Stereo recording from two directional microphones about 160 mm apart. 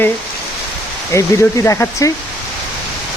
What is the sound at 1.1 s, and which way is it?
Speech, 20° left (ahead or behind).